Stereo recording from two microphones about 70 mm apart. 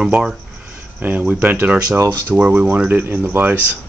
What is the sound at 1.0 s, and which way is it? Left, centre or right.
Speech, right.